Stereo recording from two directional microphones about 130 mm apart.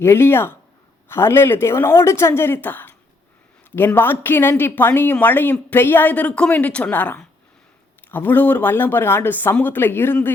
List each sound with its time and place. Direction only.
0.0 s a woman's voice: 20° left (ahead or behind)